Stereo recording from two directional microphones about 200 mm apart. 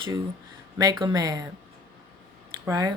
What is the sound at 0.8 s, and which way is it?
Speech, 20° right (ahead or behind).